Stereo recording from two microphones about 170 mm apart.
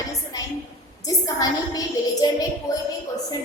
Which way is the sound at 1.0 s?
20° left (ahead or behind).